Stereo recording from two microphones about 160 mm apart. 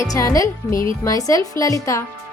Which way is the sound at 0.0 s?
20° left (ahead or behind).